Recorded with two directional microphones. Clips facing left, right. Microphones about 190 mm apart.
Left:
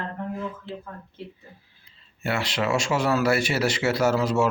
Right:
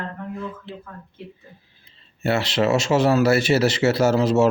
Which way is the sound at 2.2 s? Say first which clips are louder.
Right 6 dB; 25° right (ahead or behind).